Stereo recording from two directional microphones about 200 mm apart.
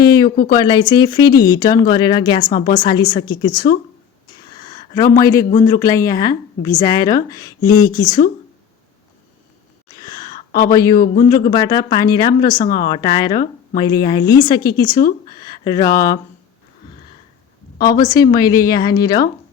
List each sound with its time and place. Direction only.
0.0 s a sound: 20° left (ahead or behind)
0.5 s speech: 25° left (ahead or behind)
4.6 s a sound: 20° left (ahead or behind)
5.2 s a woman's voice: 15° left (ahead or behind)
5.5 s speech: 35° left (ahead or behind)
5.8 s a woman's voice: 15° left (ahead or behind)
9.9 s a sound: 20° left (ahead or behind)
10.7 s a woman's voice: 15° left (ahead or behind)
10.9 s speech: 40° left (ahead or behind)
11.3 s speech: 20° left (ahead or behind)
17.9 s speech: 20° left (ahead or behind)